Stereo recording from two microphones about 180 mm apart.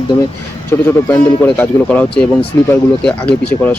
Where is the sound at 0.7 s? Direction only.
15° left (ahead or behind).